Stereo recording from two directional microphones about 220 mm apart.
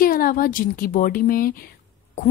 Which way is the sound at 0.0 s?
40° left (ahead or behind).